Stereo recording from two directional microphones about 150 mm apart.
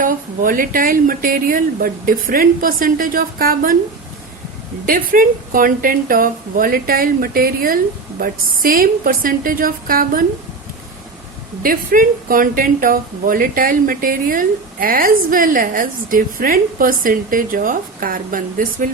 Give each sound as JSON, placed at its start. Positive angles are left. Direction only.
{"t": 0.0, "sound": "a woman's voice", "side_deg": -70}
{"t": 4.9, "sound": "a woman's voice", "side_deg": -70}
{"t": 11.6, "sound": "a woman's voice", "side_deg": -70}